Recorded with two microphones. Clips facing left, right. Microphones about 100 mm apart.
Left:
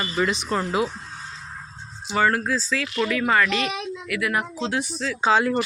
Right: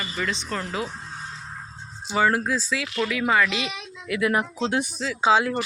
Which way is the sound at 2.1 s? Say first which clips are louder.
Even; 10° right (ahead or behind).